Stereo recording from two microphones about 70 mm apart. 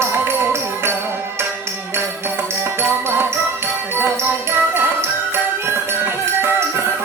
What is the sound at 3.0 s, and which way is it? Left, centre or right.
Music, right.